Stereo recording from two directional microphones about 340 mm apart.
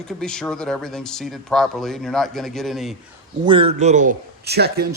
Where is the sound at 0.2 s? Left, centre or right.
Centre.